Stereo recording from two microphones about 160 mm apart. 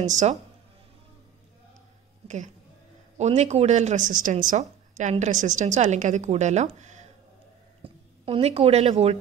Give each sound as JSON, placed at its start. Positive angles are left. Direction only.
{"t": 0.1, "sound": "a woman's voice", "side_deg": -50}
{"t": 2.2, "sound": "a woman's voice", "side_deg": -50}
{"t": 7.8, "sound": "speech", "side_deg": -35}